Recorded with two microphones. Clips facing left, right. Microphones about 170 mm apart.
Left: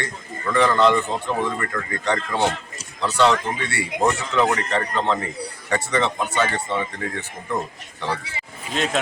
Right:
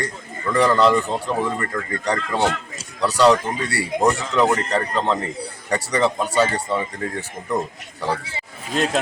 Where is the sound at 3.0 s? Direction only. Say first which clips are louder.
Right 3 dB; 35° right (ahead or behind).